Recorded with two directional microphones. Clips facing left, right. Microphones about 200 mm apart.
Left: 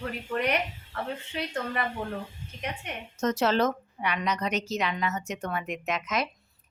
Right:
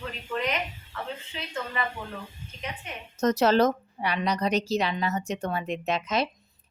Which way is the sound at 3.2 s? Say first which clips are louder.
Right 4 dB; 40° right (ahead or behind).